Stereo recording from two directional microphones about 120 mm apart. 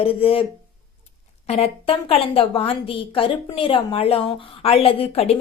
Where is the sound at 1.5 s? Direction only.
55° left (ahead or behind).